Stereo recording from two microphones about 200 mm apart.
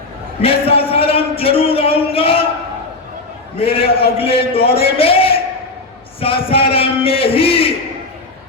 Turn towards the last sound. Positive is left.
turn(degrees=30)  # may be behind; listen again after turning